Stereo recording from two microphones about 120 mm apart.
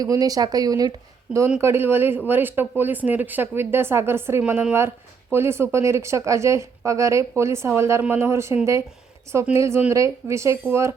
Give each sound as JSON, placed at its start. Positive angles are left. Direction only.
{"t": 0.0, "sound": "speech", "side_deg": -30}